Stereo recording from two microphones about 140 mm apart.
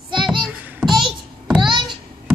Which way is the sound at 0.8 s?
30° right (ahead or behind).